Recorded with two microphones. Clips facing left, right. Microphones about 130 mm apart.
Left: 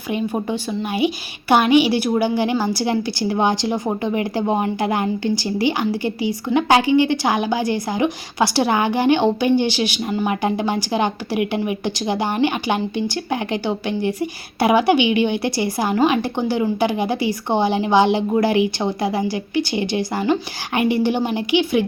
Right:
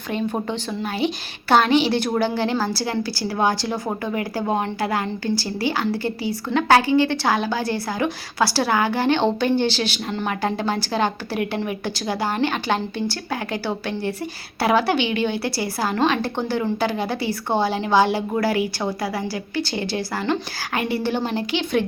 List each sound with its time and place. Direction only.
0.1 s a woman's voice: 10° left (ahead or behind)